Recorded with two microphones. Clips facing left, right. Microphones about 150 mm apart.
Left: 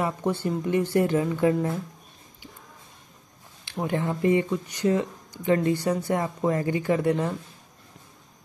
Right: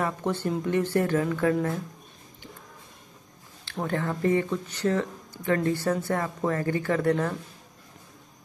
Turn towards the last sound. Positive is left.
turn(degrees=10)  # may be behind; listen again after turning